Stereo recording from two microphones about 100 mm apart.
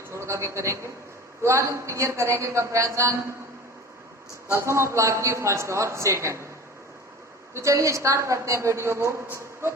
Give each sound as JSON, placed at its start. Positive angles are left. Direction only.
{"t": 0.1, "sound": "a man's voice", "side_deg": -30}
{"t": 4.5, "sound": "a man's voice", "side_deg": -30}
{"t": 7.5, "sound": "a man's voice", "side_deg": -30}